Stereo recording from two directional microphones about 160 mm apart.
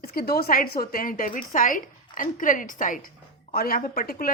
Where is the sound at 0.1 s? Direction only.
70° left (ahead or behind); by 3.0 s 55° left (ahead or behind).